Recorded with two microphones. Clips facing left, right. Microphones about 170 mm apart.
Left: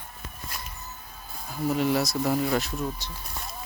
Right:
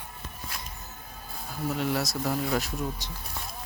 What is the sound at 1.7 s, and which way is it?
Speech, centre (ahead or behind).